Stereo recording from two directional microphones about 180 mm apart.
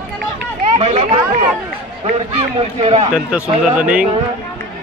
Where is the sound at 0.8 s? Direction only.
40° right (ahead or behind).